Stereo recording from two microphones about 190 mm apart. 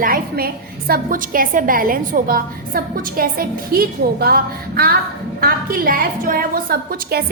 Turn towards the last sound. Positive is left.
turn(degrees=-55)  # may be behind; listen again after turning